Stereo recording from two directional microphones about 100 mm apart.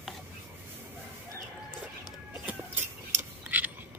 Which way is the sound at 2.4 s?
15° right (ahead or behind).